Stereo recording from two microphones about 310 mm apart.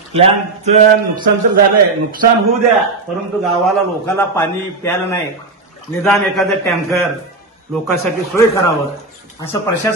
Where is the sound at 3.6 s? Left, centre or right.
Centre.